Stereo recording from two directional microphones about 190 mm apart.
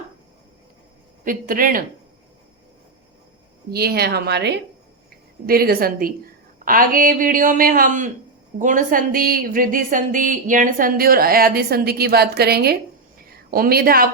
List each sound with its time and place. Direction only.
1.2 s a woman's voice: 45° right (ahead or behind)
3.7 s speech: 55° right (ahead or behind)
5.5 s a woman's voice: 50° right (ahead or behind)